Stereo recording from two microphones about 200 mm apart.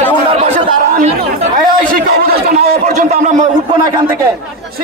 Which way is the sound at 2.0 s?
45° right (ahead or behind).